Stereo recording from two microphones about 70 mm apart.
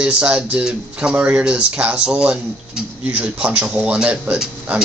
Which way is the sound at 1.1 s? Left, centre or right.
Right.